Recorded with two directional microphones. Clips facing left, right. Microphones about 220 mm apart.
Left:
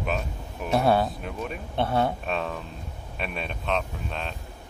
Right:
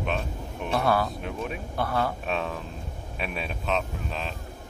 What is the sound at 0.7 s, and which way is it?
Speech, 30° left (ahead or behind).